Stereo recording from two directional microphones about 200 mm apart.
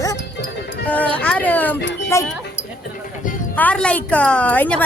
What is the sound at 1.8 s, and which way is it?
Speech, 60° left (ahead or behind).